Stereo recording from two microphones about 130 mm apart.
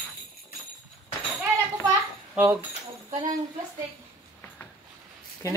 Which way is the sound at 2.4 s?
20° right (ahead or behind).